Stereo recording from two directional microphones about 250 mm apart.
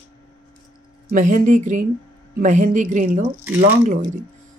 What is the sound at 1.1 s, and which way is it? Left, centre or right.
Speech, right.